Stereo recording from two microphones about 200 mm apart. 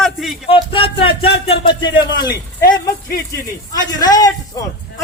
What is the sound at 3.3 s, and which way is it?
A man's voice, 20° left (ahead or behind).